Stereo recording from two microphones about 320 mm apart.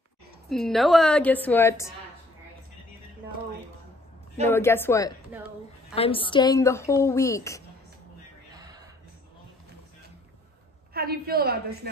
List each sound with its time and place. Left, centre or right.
0.5 s a woman's voice: centre
4.5 s a woman's voice: centre
5.3 s a woman's voice: centre
5.9 s a woman's voice: centre
10.9 s a woman's voice: right